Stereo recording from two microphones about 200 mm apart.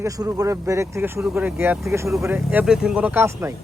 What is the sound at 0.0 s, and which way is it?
A man's voice, 15° right (ahead or behind).